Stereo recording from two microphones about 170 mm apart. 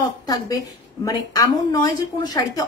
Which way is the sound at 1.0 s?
20° left (ahead or behind).